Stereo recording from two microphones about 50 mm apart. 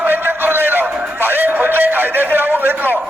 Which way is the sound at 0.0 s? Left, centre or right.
Right.